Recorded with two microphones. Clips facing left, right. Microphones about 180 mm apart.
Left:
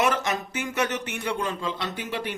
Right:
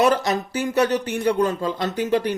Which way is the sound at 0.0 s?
35° right (ahead or behind).